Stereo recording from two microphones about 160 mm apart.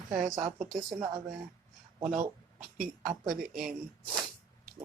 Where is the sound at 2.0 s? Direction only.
55° right (ahead or behind).